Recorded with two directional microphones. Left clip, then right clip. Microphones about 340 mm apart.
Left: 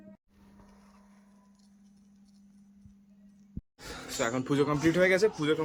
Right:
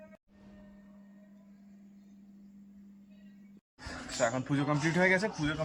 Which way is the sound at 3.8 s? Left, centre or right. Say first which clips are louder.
Right 1 dB; centre.